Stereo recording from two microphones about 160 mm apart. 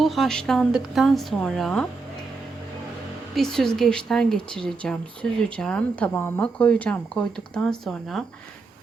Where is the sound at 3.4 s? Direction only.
5° left (ahead or behind).